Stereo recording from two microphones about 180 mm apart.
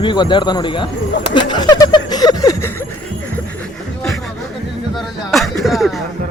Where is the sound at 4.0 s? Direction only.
Centre (ahead or behind).